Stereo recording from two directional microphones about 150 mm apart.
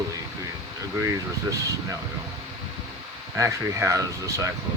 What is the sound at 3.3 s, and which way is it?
Speech, 20° right (ahead or behind).